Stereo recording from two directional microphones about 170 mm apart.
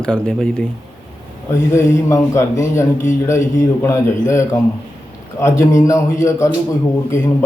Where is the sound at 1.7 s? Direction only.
15° left (ahead or behind).